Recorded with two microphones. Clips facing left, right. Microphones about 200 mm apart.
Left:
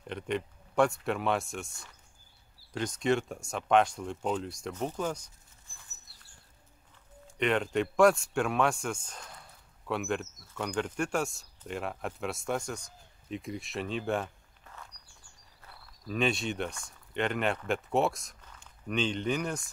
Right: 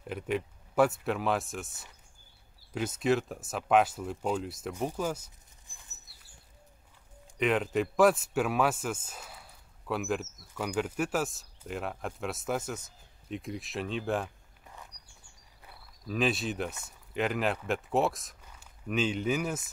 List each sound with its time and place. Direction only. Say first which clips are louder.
0.0 s speech: right 1 dB; 5° right (ahead or behind)
5.7 s dog: even; 15° right (ahead or behind)
7.3 s speech: even; centre (ahead or behind)
14.2 s walk: even; 15° right (ahead or behind)
16.1 s speech: even; centre (ahead or behind)